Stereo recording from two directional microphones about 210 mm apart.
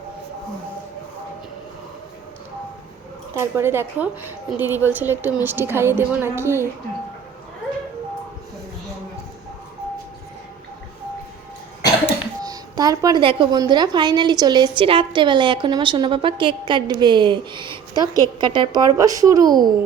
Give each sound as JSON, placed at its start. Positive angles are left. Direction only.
{"t": 3.3, "sound": "a woman's voice", "side_deg": -10}
{"t": 12.4, "sound": "a woman's voice", "side_deg": -20}